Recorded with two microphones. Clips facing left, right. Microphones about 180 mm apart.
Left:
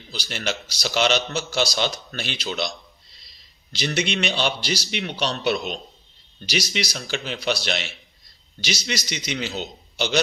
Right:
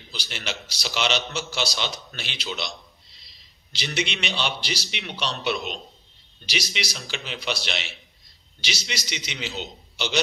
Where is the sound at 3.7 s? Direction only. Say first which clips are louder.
Left 5 dB; 45° left (ahead or behind).